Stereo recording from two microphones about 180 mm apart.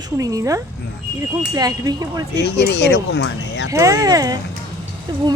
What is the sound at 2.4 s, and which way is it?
Speech, 70° left (ahead or behind).